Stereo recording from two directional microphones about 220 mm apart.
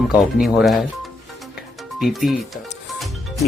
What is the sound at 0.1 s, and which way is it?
Speech, centre (ahead or behind).